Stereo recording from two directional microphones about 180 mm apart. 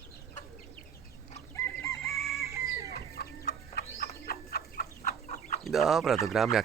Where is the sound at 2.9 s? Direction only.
60° left (ahead or behind).